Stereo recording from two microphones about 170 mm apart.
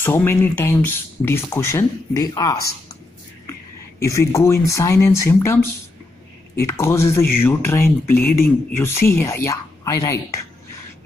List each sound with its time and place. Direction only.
0.0 s speech: 15° left (ahead or behind)
4.0 s speech: 15° left (ahead or behind)